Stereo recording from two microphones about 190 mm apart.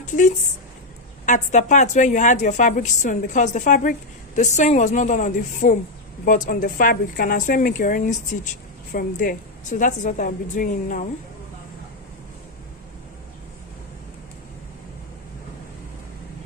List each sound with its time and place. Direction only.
0.0 s a woman's voice: 40° left (ahead or behind)